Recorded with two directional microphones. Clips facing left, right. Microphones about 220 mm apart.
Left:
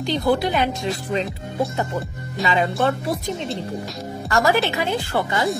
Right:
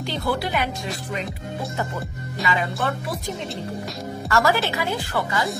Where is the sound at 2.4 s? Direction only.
25° left (ahead or behind).